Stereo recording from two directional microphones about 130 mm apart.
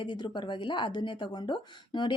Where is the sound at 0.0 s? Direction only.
35° left (ahead or behind).